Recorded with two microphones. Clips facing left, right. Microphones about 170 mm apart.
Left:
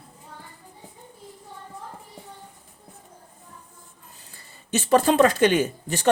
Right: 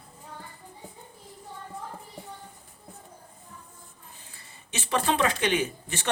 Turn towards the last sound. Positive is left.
turn(degrees=40)  # may be behind; listen again after turning